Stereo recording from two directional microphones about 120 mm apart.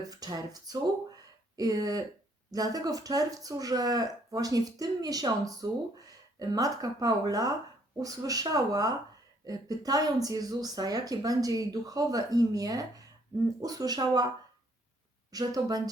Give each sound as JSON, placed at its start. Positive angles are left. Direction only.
{"t": 0.1, "sound": "speech", "side_deg": -35}
{"t": 15.3, "sound": "speech", "side_deg": -30}